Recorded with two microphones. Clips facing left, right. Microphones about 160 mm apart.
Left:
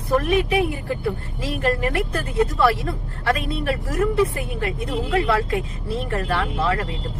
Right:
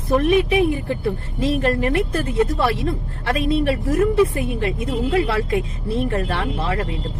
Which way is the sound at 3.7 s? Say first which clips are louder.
Right 4 dB; 25° right (ahead or behind).